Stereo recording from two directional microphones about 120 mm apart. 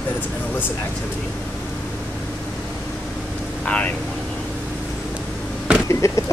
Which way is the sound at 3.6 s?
10° left (ahead or behind).